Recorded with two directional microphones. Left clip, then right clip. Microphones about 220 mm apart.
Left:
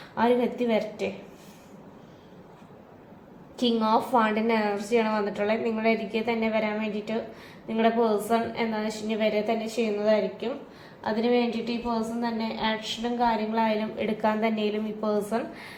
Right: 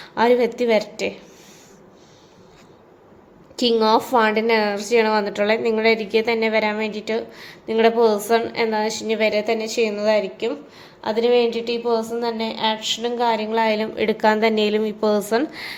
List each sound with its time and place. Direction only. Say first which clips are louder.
0.1 s a woman's voice: right 7 dB; 50° right (ahead or behind)
3.6 s a woman's voice: right 7 dB; 45° right (ahead or behind)